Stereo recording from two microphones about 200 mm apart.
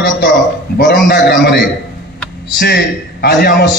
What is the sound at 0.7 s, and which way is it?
A man's voice, 50° left (ahead or behind).